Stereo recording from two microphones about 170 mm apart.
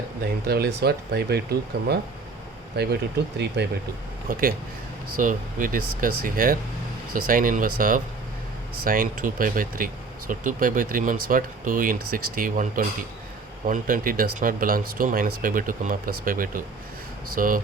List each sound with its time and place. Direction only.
0.4 s speech: 70° right (ahead or behind)
4.3 s speech: 55° right (ahead or behind)